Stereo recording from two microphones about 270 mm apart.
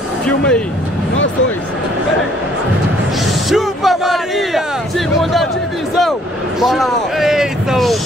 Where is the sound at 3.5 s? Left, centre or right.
Centre.